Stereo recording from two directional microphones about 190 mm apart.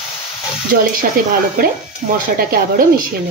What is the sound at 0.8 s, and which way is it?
Speech, 45° right (ahead or behind).